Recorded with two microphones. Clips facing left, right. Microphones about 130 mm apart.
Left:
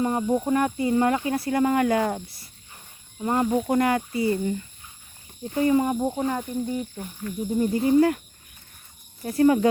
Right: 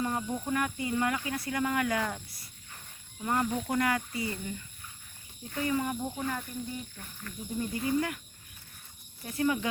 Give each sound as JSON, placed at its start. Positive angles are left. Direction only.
{"t": 0.0, "sound": "speech", "side_deg": 30}
{"t": 7.6, "sound": "speech", "side_deg": 30}
{"t": 9.2, "sound": "speech", "side_deg": 40}